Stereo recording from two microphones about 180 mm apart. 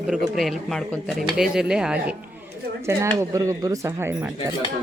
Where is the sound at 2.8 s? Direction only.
15° right (ahead or behind).